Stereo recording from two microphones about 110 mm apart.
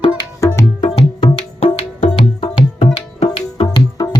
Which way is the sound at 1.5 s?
80° left.